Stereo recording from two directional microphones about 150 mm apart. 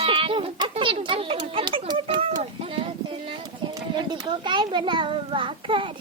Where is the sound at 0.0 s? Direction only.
35° right (ahead or behind).